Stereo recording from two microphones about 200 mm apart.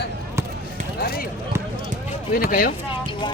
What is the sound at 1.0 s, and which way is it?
Speech, 50° left (ahead or behind).